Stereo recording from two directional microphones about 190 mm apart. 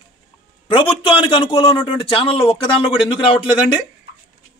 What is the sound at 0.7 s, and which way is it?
A man's voice, 25° left (ahead or behind).